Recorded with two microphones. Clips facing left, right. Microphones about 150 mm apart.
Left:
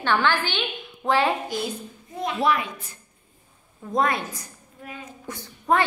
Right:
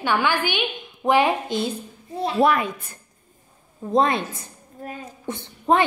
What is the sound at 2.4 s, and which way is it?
Speech, 50° right (ahead or behind).